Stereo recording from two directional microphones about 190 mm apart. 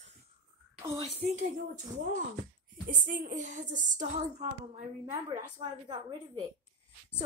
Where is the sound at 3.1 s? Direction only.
40° right (ahead or behind).